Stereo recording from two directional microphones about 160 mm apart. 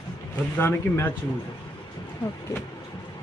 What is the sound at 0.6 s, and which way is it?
Speech, 15° left (ahead or behind).